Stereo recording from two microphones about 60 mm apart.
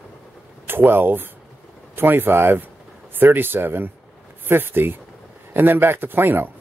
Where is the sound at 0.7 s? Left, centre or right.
Right.